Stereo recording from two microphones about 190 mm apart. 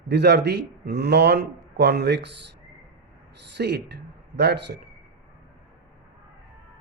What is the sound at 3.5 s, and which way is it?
Speech, 60° right (ahead or behind).